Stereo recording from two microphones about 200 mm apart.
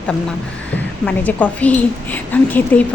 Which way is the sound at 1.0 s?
5° left (ahead or behind).